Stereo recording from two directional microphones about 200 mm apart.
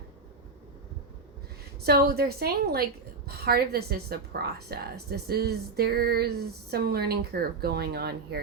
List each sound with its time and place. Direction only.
1.8 s a woman's voice: 50° right (ahead or behind)